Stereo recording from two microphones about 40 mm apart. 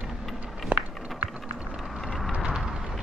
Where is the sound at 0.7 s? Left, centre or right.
Right.